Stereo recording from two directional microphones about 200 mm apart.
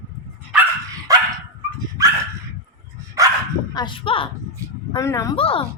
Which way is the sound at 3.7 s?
25° left (ahead or behind).